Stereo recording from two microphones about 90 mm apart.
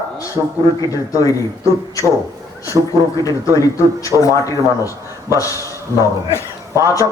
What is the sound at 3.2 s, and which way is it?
A man's voice, 40° left (ahead or behind).